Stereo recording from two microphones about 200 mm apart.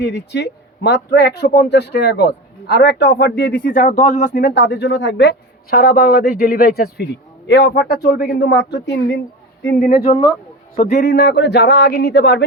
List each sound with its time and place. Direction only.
0.0 s speech: 60° left (ahead or behind); by 4.5 s 40° left (ahead or behind)
4.5 s a man's voice: 60° left (ahead or behind)
9.6 s speech: 45° left (ahead or behind)
11.1 s speech: 60° left (ahead or behind)